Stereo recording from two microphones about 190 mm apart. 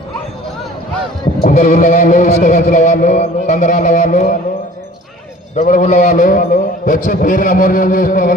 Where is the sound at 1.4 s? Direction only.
40° left (ahead or behind).